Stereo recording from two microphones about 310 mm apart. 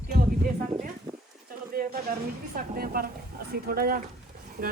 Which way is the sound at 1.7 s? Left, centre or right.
Right.